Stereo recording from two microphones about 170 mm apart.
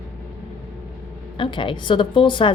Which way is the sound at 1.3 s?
30° left (ahead or behind).